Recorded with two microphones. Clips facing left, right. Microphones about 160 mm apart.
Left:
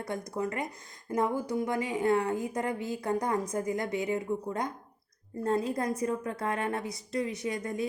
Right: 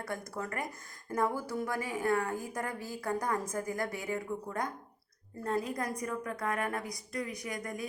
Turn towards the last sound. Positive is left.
turn(degrees=25)  # may be behind; listen again after turning